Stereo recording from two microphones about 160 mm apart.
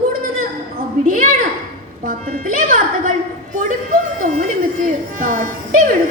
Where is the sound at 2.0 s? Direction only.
60° right (ahead or behind).